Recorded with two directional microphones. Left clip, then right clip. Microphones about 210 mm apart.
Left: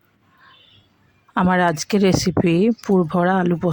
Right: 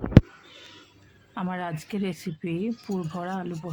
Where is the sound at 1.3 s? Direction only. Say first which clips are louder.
Left 15 dB; 45° left (ahead or behind).